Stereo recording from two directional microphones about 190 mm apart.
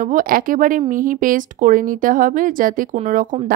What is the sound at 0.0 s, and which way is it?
Speech, 45° right (ahead or behind).